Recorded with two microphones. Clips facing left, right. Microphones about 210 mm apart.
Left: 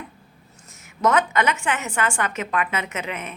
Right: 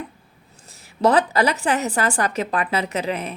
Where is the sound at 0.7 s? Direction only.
35° right (ahead or behind).